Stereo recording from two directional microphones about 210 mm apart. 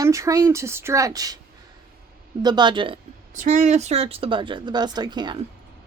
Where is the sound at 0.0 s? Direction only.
15° right (ahead or behind).